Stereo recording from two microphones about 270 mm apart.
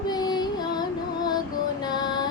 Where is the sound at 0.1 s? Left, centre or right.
Centre.